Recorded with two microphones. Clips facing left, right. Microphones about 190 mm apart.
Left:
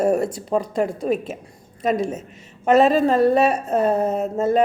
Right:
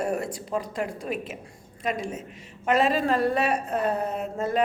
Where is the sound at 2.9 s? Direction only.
45° left (ahead or behind).